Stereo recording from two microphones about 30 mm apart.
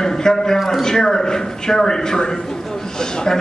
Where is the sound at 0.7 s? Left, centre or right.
Centre.